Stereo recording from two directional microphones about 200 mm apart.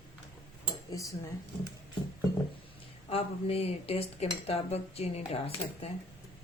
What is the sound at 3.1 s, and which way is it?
Speech, 30° left (ahead or behind).